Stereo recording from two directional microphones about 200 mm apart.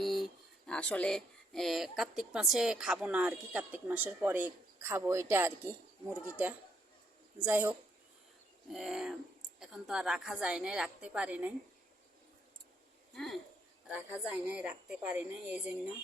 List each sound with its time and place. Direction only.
0.0 s a sound: centre (ahead or behind)
0.7 s a woman's voice: 5° left (ahead or behind); by 5.7 s 10° right (ahead or behind)
7.3 s a woman's voice: 10° right (ahead or behind)
13.1 s a woman's voice: centre (ahead or behind)